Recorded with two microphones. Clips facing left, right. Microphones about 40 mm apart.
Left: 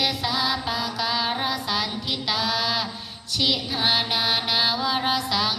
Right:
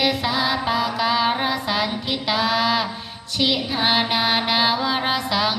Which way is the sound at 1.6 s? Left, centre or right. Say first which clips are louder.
Right 4 dB; right.